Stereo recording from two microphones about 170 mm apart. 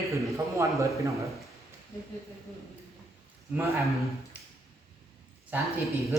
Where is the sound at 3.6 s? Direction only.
15° right (ahead or behind).